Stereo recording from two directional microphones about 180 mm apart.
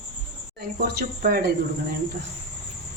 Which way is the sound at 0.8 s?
55° right (ahead or behind).